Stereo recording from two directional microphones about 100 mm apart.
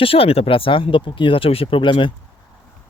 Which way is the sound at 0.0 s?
70° left (ahead or behind).